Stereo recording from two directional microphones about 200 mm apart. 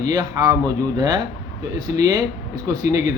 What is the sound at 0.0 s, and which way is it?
Speech, 20° right (ahead or behind).